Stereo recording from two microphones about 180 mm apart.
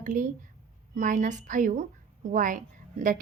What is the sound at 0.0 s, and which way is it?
A woman's voice, 45° right (ahead or behind).